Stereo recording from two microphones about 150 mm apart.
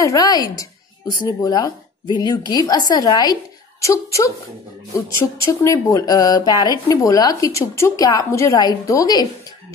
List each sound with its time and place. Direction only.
0.0 s speech: 25° left (ahead or behind)
5.5 s speech: 20° left (ahead or behind)